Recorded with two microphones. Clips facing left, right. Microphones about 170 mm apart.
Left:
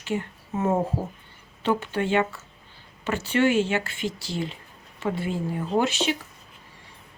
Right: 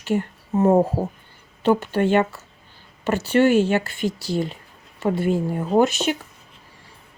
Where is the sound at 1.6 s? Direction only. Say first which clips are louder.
Right 6 dB; 40° right (ahead or behind).